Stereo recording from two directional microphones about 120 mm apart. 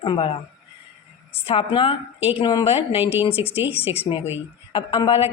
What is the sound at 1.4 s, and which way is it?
Speech, 45° left (ahead or behind).